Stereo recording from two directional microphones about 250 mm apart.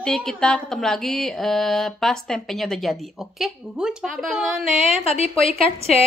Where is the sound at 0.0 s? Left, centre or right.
Centre.